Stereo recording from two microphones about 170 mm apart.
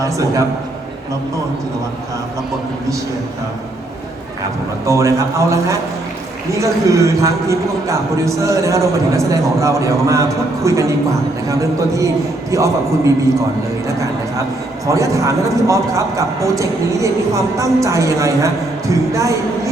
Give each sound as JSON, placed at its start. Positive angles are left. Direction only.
{"t": 0.0, "sound": "a man's voice", "side_deg": -20}
{"t": 4.9, "sound": "a man's voice", "side_deg": -20}
{"t": 13.8, "sound": "a man's voice", "side_deg": -20}